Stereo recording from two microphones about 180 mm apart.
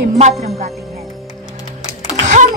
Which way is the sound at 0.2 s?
35° right (ahead or behind).